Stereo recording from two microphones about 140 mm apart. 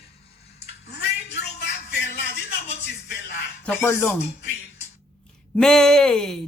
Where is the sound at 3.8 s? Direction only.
20° left (ahead or behind).